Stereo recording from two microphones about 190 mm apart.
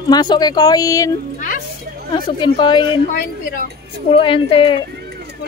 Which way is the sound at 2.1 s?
25° left (ahead or behind).